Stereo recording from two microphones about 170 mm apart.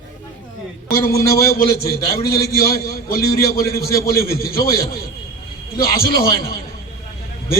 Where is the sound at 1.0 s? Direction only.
65° left (ahead or behind).